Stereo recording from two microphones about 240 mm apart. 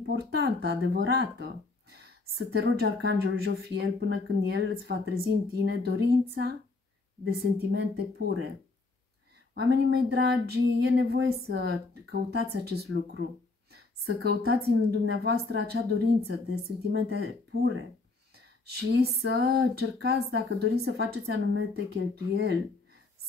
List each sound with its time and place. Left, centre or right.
0.0 s speech: right
7.2 s speech: right
9.5 s speech: right
14.2 s speech: right